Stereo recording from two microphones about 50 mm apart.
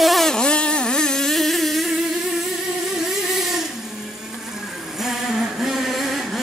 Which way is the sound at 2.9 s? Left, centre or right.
Centre.